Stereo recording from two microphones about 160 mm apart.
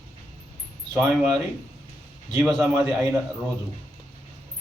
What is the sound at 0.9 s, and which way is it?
Speech, 15° right (ahead or behind).